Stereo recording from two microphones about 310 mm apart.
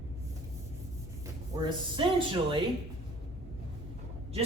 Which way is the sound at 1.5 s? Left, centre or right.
Centre.